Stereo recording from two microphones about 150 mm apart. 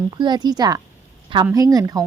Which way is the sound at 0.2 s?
30° right (ahead or behind).